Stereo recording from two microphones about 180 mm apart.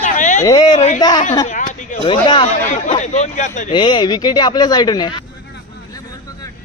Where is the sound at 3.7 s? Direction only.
25° left (ahead or behind).